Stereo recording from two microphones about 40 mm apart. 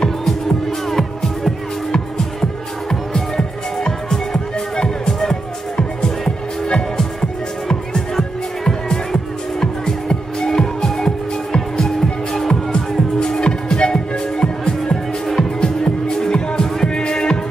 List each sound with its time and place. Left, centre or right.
0.7 s music: centre; by 17.4 s left